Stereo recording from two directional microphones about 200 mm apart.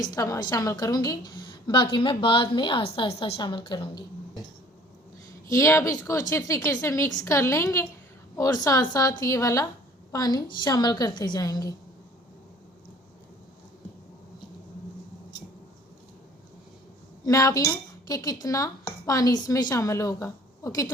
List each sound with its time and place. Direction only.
0.0 s a woman's voice: 20° left (ahead or behind)
5.5 s a woman's voice: 15° left (ahead or behind)
17.2 s speech: 15° left (ahead or behind)